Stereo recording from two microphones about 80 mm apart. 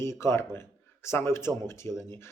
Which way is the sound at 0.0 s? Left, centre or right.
Left.